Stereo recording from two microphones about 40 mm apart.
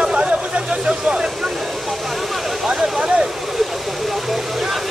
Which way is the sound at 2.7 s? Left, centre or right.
Right.